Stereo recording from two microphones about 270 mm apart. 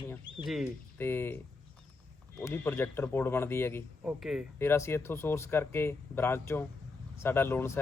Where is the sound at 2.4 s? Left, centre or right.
Centre.